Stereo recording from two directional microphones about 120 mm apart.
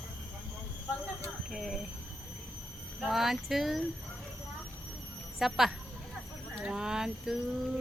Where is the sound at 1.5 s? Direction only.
Centre (ahead or behind).